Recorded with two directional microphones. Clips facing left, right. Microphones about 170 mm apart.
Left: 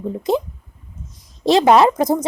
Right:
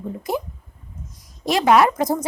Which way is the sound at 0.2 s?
25° left (ahead or behind).